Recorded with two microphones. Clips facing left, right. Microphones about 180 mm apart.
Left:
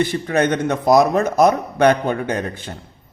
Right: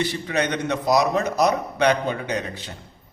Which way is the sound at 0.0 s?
50° left (ahead or behind).